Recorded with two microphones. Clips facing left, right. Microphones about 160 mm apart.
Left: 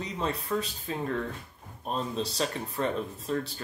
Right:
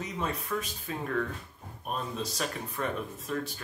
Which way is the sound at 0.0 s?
30° left (ahead or behind).